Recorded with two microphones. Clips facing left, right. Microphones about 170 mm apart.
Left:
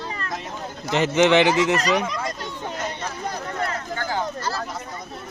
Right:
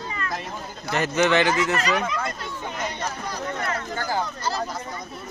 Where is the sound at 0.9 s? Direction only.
20° left (ahead or behind).